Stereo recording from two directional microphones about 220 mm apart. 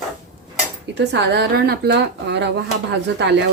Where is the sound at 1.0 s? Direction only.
50° right (ahead or behind).